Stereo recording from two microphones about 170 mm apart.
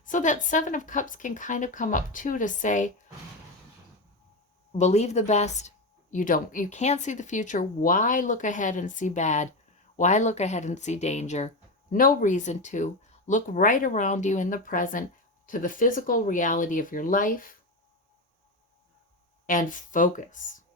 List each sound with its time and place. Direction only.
0.0 s speech: 50° left (ahead or behind)
4.8 s speech: 40° left (ahead or behind)
19.5 s speech: 50° left (ahead or behind)